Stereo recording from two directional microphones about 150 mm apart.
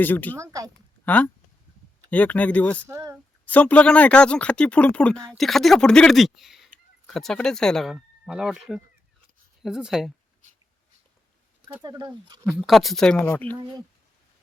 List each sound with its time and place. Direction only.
0.0 s speech: 10° left (ahead or behind)
0.3 s speech: 20° right (ahead or behind)
1.0 s speech: 10° left (ahead or behind)
2.8 s speech: 20° right (ahead or behind)
3.4 s speech: 10° left (ahead or behind)
11.8 s speech: 30° right (ahead or behind)
12.5 s speech: centre (ahead or behind)